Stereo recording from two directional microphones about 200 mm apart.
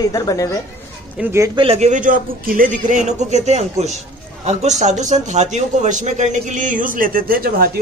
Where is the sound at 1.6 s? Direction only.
30° right (ahead or behind); by 7.7 s 45° right (ahead or behind).